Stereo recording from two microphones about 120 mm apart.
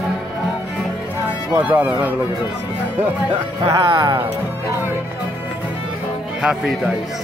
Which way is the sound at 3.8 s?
40° right (ahead or behind).